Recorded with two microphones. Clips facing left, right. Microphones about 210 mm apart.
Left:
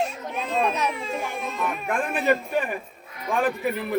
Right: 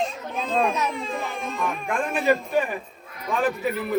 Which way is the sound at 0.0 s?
10° left (ahead or behind).